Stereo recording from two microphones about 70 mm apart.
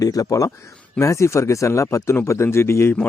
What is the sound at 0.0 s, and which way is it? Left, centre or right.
Speech, left.